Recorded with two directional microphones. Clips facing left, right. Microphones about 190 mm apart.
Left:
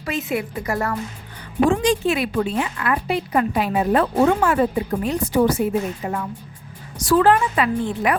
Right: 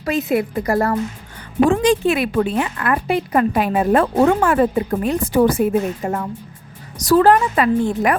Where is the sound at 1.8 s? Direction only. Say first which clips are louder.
Right 3 dB; 60° right (ahead or behind).